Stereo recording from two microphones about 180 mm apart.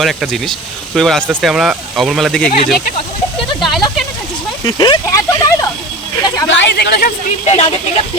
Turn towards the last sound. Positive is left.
turn(degrees=35)  # may be behind; listen again after turning